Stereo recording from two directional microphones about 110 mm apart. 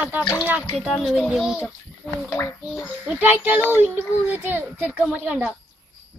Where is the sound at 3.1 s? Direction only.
15° right (ahead or behind).